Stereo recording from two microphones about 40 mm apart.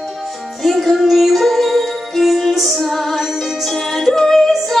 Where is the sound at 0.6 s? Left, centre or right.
Centre.